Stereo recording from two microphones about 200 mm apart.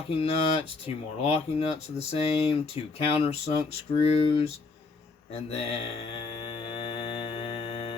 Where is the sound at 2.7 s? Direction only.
30° left (ahead or behind).